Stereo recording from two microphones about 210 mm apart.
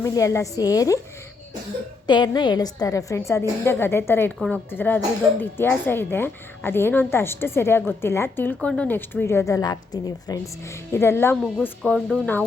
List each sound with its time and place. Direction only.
0.0 s a woman's voice: 15° left (ahead or behind)
2.0 s a woman's voice: 20° left (ahead or behind); by 12.4 s 5° left (ahead or behind)